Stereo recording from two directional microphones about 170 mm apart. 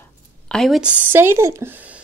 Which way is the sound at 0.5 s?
Centre (ahead or behind).